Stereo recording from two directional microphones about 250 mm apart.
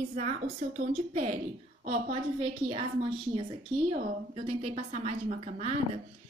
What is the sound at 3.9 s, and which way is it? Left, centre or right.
A woman's voice, right.